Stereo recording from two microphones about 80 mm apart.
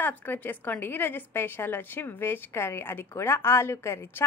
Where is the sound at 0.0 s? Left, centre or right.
Left.